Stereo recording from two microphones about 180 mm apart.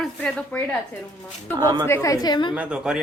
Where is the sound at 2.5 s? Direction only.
5° right (ahead or behind).